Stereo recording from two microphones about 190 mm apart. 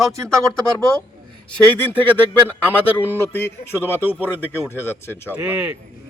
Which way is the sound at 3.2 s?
10° left (ahead or behind).